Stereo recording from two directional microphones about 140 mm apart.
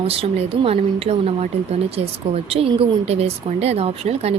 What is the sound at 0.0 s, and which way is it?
Speech, 45° right (ahead or behind).